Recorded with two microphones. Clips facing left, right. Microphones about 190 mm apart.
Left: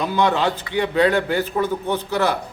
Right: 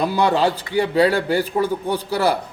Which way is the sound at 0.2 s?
35° right (ahead or behind).